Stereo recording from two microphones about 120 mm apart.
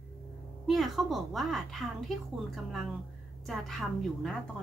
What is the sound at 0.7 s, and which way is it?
A woman's voice, centre (ahead or behind).